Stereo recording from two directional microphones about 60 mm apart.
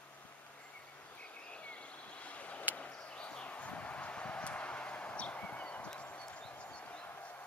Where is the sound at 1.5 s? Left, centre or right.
Left.